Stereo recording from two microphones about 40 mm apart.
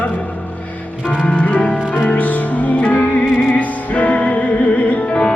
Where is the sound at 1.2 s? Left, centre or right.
Left.